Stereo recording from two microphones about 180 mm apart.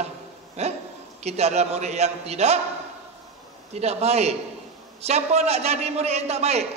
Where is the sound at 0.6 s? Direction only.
35° right (ahead or behind).